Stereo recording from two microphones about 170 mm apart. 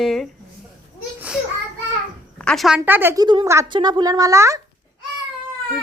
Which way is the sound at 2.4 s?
Centre (ahead or behind).